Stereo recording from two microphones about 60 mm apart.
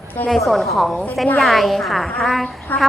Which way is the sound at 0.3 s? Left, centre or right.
Centre.